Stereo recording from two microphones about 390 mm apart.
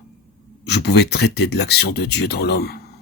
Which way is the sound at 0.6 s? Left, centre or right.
Left.